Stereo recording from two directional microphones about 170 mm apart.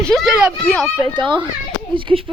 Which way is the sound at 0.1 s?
Centre (ahead or behind).